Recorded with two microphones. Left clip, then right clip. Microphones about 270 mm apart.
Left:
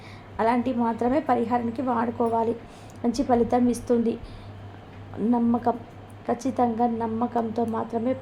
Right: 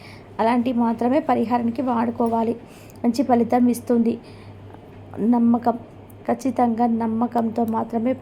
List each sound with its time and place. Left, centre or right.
0.3 s a woman's voice: centre
5.3 s a woman's voice: centre